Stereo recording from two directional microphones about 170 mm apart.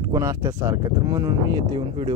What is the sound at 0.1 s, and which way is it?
Speech, 20° right (ahead or behind).